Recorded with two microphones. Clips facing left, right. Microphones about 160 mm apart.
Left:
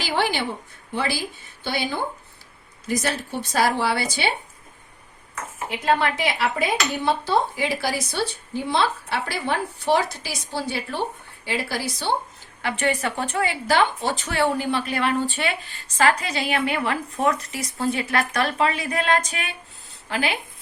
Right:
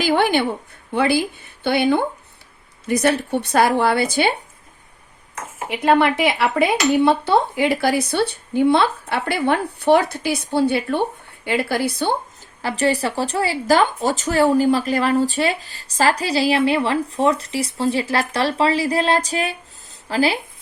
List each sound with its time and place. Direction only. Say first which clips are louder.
0.0 s a woman's voice: right 7 dB; 55° right (ahead or behind)
5.3 s speech: right 3 dB; 65° right (ahead or behind)
12.6 s speech: right 4 dB; 35° right (ahead or behind)